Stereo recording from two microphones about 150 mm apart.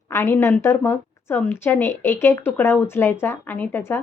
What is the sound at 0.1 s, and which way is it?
A woman's voice, 15° left (ahead or behind).